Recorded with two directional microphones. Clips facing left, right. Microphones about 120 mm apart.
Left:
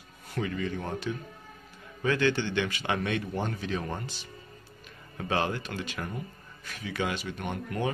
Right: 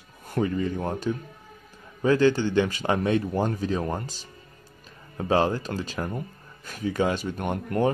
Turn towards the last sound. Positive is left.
turn(degrees=-45)  # may be behind; listen again after turning